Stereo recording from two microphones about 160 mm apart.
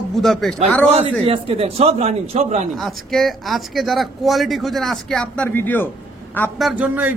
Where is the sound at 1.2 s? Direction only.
40° right (ahead or behind).